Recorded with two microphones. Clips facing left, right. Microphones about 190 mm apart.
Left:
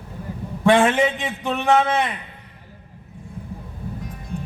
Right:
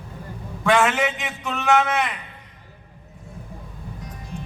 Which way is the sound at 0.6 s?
30° left (ahead or behind).